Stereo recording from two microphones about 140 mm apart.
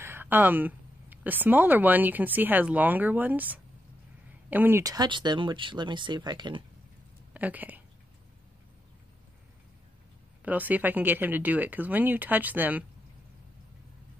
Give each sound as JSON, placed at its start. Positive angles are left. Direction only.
{"t": 0.0, "sound": "speech", "side_deg": -15}
{"t": 7.3, "sound": "speech", "side_deg": -10}
{"t": 10.4, "sound": "speech", "side_deg": -10}